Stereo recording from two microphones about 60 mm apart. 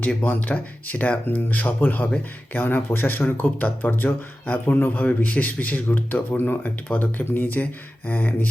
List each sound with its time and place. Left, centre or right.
0.3 s speech: left